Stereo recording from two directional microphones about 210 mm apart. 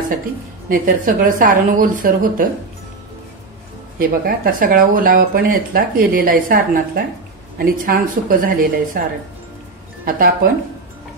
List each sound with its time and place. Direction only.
0.7 s speech: 40° right (ahead or behind)
4.0 s speech: 40° right (ahead or behind)
10.0 s speech: 40° right (ahead or behind)